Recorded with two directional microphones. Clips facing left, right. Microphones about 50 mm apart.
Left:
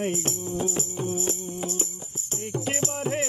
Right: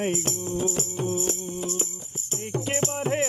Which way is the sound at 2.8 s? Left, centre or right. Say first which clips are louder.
Right 2 dB; right.